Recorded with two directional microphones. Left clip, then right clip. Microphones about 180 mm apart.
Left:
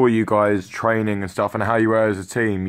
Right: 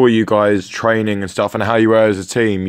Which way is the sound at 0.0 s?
20° right (ahead or behind).